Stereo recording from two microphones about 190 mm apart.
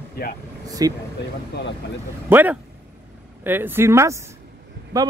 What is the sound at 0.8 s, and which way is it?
Speech, 20° right (ahead or behind).